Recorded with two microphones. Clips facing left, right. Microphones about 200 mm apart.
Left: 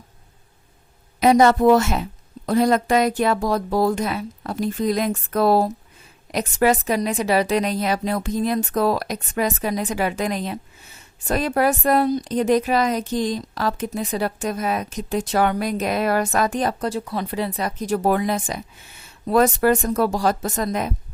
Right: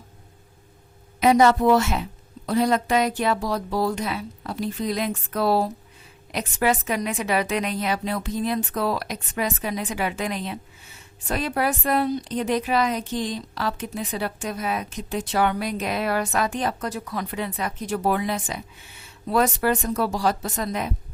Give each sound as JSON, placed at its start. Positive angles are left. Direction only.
{"t": 1.2, "sound": "a woman's voice", "side_deg": 40}
{"t": 16.9, "sound": "a woman's voice", "side_deg": 30}